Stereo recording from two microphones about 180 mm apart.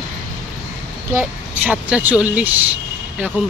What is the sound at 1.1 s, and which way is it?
Speech, 10° right (ahead or behind).